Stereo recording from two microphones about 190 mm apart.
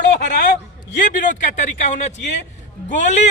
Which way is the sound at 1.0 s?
45° left (ahead or behind).